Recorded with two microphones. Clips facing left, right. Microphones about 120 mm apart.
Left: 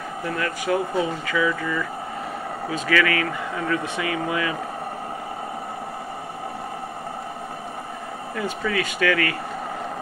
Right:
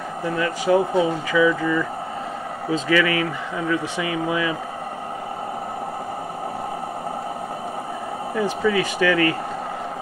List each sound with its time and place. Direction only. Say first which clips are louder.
0.2 s speech: right 4 dB; 20° right (ahead or behind)
8.4 s speech: right 5 dB; 20° right (ahead or behind)